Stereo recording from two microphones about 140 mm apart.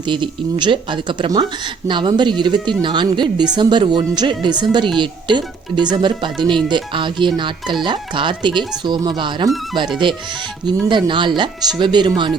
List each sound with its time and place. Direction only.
0.1 s speech: 35° right (ahead or behind)